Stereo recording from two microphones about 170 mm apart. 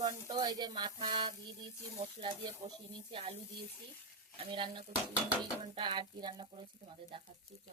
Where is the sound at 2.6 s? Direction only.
35° right (ahead or behind).